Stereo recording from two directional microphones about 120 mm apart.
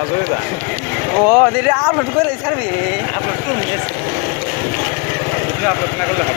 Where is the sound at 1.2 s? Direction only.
5° right (ahead or behind).